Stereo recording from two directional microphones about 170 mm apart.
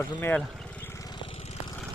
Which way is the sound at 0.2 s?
10° left (ahead or behind).